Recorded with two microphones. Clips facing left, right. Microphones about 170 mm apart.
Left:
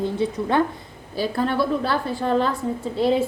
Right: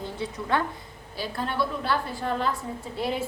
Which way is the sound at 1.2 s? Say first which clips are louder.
Left 7 dB; 35° left (ahead or behind).